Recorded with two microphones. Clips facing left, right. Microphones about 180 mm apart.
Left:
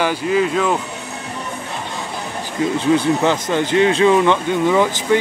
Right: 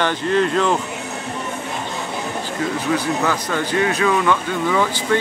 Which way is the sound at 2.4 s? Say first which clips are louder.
Left 7 dB; 20° left (ahead or behind).